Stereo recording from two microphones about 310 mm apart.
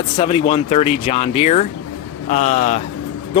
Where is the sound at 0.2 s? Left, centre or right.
Centre.